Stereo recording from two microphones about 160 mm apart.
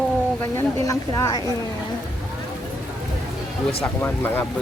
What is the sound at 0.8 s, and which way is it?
Speech, 20° left (ahead or behind).